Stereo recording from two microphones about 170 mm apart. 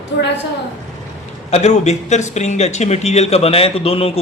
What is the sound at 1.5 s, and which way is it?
Speech, 40° left (ahead or behind).